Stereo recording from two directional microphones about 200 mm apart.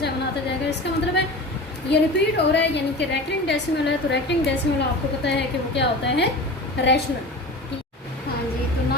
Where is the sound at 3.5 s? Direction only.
60° left (ahead or behind).